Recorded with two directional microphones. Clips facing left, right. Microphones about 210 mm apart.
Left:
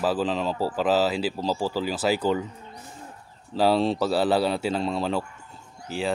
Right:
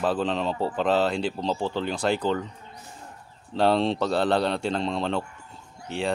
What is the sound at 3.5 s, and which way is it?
Speech, 5° left (ahead or behind).